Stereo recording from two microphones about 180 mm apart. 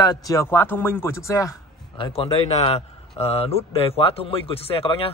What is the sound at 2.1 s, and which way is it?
Speech, 35° left (ahead or behind).